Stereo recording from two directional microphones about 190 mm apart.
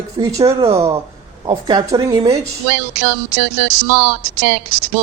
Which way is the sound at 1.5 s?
20° right (ahead or behind).